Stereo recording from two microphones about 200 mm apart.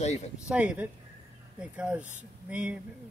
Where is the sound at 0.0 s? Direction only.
35° left (ahead or behind).